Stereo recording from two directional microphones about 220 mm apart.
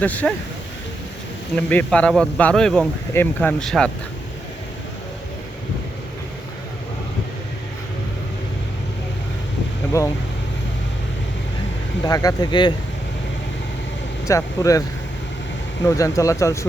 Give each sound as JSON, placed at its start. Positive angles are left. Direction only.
{"t": 0.0, "sound": "speech", "side_deg": 5}
{"t": 1.5, "sound": "speech", "side_deg": 5}
{"t": 10.0, "sound": "speech", "side_deg": 15}
{"t": 12.0, "sound": "speech", "side_deg": 15}
{"t": 14.3, "sound": "speech", "side_deg": 15}